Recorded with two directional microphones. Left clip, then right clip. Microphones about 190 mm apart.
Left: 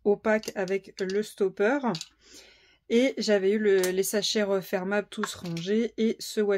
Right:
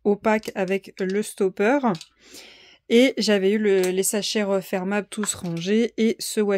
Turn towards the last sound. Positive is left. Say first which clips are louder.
# right 4 dB
turn(degrees=-45)  # may be behind; listen again after turning